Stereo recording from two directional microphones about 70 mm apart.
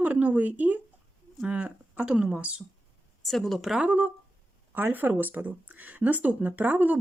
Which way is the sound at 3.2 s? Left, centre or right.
Centre.